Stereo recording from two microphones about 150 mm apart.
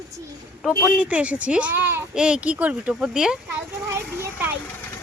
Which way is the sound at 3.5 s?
15° right (ahead or behind).